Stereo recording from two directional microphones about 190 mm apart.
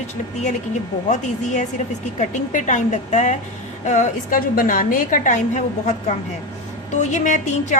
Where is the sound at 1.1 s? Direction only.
40° left (ahead or behind).